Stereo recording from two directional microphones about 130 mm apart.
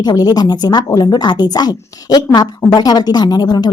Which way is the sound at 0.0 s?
30° left (ahead or behind).